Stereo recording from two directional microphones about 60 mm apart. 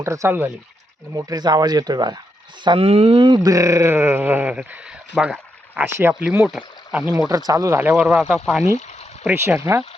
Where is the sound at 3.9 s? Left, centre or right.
Right.